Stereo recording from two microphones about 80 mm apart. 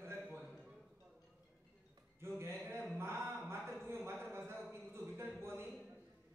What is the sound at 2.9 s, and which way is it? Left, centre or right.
Music, right.